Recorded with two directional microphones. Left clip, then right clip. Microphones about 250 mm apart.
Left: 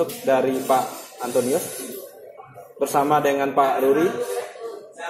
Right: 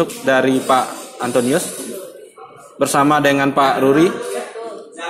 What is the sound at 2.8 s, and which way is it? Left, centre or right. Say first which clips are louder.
Speech: right 5 dB; right.